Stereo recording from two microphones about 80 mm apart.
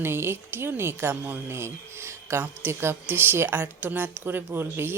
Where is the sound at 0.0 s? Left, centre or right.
Right.